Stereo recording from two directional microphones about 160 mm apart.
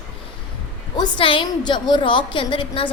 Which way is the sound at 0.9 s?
30° left (ahead or behind).